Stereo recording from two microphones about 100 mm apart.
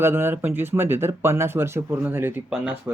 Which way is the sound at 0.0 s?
20° right (ahead or behind).